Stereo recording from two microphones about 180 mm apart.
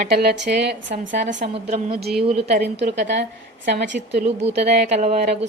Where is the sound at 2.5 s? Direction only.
60° right (ahead or behind).